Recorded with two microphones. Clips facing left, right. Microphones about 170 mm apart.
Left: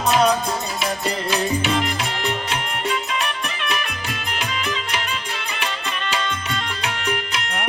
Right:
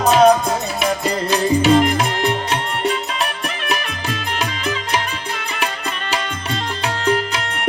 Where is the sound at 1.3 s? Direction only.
40° right (ahead or behind).